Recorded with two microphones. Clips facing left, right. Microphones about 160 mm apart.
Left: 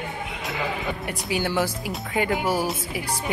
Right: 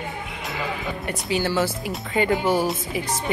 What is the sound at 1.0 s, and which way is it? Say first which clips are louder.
Speech: right 4 dB; 15° left (ahead or behind).